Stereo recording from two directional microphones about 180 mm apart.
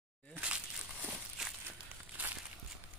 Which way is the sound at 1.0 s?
5° right (ahead or behind).